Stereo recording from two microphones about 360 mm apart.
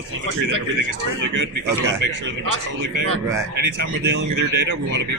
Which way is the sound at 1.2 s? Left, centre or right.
Right.